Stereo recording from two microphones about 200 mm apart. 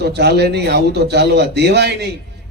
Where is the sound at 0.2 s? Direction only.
55° right (ahead or behind).